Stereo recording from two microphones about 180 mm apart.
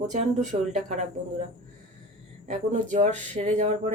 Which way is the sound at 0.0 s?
40° right (ahead or behind).